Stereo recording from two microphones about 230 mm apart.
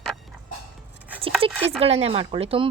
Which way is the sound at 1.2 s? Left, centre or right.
Right.